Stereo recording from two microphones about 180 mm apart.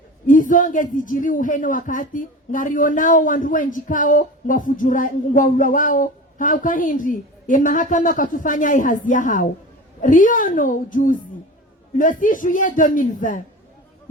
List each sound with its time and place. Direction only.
0.3 s speech: 45° left (ahead or behind)